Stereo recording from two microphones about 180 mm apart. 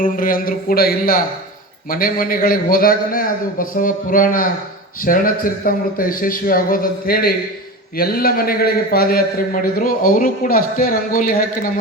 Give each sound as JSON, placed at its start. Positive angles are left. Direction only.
{"t": 0.0, "sound": "a man's voice", "side_deg": 50}